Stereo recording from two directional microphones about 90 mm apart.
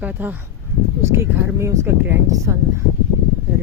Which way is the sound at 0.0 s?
20° right (ahead or behind).